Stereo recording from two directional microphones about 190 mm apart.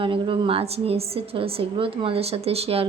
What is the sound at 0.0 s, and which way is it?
A woman's voice, 25° right (ahead or behind).